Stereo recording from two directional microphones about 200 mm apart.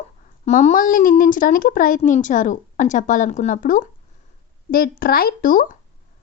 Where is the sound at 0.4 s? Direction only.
40° left (ahead or behind).